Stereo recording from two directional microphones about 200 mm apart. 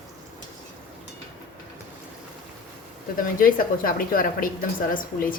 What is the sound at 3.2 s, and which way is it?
A woman's voice, 45° left (ahead or behind).